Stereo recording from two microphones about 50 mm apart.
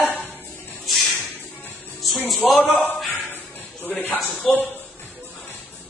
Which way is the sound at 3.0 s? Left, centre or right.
Centre.